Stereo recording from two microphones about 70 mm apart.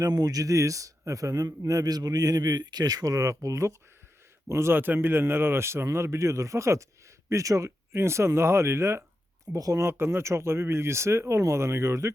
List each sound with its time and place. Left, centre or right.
0.0 s a man's voice: right
4.7 s speech: right
9.5 s speech: right
9.8 s speech: right